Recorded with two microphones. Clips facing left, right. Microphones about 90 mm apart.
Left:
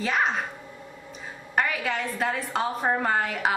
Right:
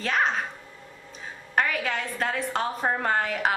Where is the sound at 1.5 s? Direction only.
Centre (ahead or behind).